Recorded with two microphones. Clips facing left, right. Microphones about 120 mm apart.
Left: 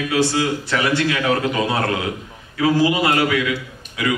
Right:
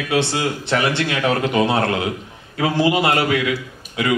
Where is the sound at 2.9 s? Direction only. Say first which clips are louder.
Even; 25° right (ahead or behind).